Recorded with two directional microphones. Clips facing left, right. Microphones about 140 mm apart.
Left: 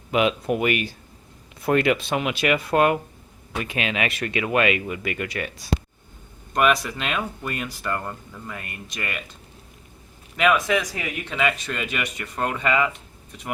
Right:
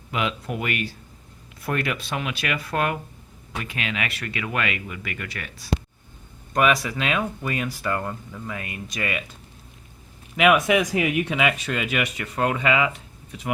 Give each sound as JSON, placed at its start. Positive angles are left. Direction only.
{"t": 0.1, "sound": "speech", "side_deg": 20}
{"t": 6.5, "sound": "speech", "side_deg": 0}
{"t": 10.3, "sound": "speech", "side_deg": -10}